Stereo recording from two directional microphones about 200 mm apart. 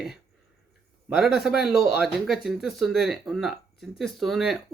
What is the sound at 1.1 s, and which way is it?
Speech, centre (ahead or behind).